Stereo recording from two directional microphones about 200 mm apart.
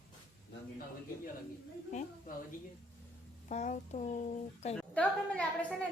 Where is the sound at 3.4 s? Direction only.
35° left (ahead or behind).